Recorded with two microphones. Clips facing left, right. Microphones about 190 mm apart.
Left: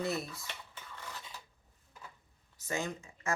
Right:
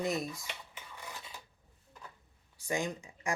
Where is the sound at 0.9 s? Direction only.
10° right (ahead or behind).